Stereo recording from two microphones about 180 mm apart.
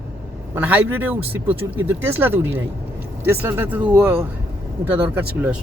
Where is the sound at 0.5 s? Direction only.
10° right (ahead or behind).